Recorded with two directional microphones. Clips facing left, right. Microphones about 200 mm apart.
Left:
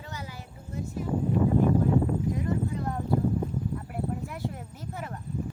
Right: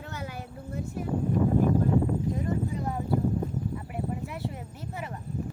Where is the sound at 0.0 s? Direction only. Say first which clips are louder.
Right 3 dB; 55° right (ahead or behind).